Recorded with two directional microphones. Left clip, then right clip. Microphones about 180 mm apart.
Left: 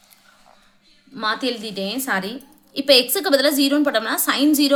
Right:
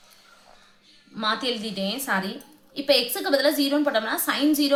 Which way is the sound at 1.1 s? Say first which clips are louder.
Left 3 dB; 35° left (ahead or behind).